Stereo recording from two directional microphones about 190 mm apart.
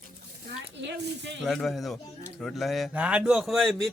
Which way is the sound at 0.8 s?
65° right (ahead or behind).